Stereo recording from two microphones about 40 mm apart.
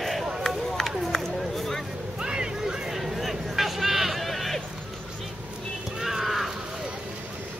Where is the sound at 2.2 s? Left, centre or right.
Centre.